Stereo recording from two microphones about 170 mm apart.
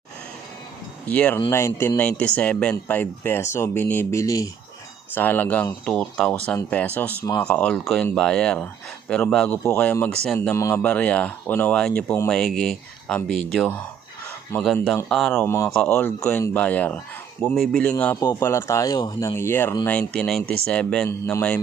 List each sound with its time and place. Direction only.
1.0 s speech: 10° left (ahead or behind)
12.3 s speech: centre (ahead or behind)
15.3 s speech: 15° left (ahead or behind)
18.2 s speech: 20° left (ahead or behind)